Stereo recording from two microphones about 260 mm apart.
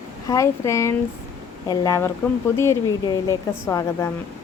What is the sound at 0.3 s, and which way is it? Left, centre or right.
Speech, centre.